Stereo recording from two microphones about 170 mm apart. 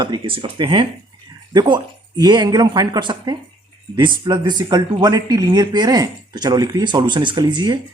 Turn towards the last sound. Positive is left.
turn(degrees=-25)  # may be behind; listen again after turning